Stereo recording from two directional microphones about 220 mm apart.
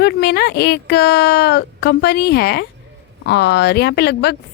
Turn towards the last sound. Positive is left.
turn(degrees=50)  # may be behind; listen again after turning